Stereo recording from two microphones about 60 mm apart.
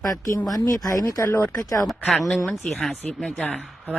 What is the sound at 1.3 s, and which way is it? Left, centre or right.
Speech, left.